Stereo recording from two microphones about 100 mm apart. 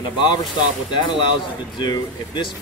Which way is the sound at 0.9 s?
50° left (ahead or behind).